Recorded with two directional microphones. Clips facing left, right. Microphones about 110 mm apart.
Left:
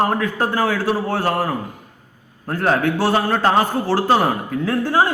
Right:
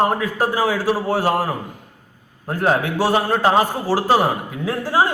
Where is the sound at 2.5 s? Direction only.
15° right (ahead or behind).